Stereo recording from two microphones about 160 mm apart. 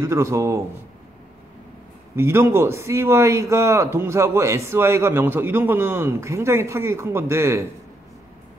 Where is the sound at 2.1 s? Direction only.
15° right (ahead or behind).